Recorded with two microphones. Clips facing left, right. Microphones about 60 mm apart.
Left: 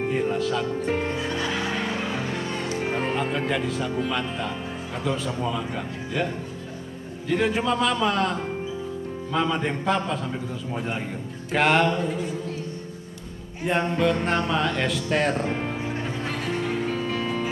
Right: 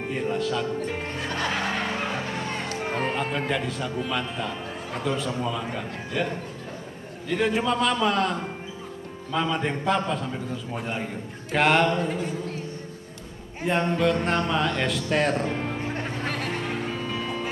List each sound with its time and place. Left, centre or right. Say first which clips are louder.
0.1 s speech: right 1 dB; centre
0.8 s speech: left 5 dB; left
1.1 s music: left 1 dB; right
2.8 s music: left 1 dB; centre
3.2 s speech: left 1 dB; centre
7.2 s speech: left 1 dB; centre
12.0 s a woman's voice: even; right
13.7 s speech: even; centre
16.0 s music: even; right
17.0 s music: left 3 dB; centre